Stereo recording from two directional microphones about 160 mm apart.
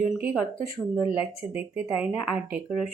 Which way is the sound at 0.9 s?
10° right (ahead or behind).